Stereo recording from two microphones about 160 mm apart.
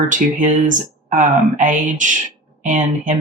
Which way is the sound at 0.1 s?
55° right (ahead or behind).